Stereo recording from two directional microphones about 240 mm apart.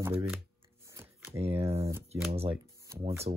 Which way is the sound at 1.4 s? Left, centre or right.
Right.